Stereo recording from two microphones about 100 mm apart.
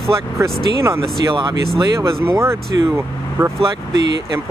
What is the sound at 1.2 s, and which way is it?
Speech, 50° right (ahead or behind).